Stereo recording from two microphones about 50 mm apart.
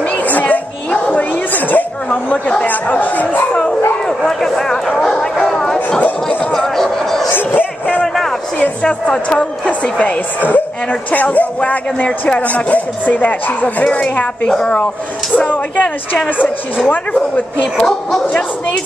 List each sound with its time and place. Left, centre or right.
0.2 s a sound: left
2.2 s a woman's voice: left
2.7 s speech: left
4.2 s a sound: centre
7.2 s bow-wow: left
8.8 s a woman's voice: centre
14.5 s a woman's voice: centre
15.3 s speech: left
17.7 s a woman's voice: centre